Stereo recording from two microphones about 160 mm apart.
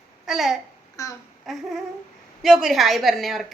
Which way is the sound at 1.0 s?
20° left (ahead or behind).